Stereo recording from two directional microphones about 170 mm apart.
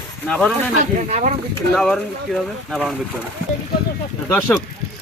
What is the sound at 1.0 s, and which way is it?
Speech, 40° right (ahead or behind).